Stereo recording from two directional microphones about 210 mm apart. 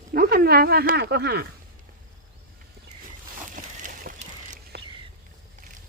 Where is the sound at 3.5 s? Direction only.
40° right (ahead or behind).